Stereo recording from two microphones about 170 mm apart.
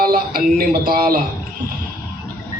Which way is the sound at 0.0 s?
60° right (ahead or behind).